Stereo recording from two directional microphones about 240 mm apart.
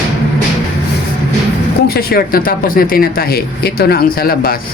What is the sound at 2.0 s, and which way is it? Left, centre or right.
Speech, left.